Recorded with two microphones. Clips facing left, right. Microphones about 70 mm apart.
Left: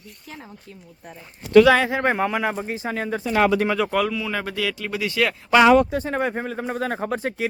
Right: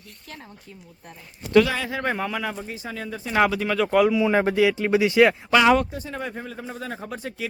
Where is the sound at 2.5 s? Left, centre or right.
Left.